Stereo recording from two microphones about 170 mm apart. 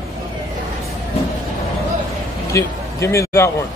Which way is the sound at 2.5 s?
15° left (ahead or behind).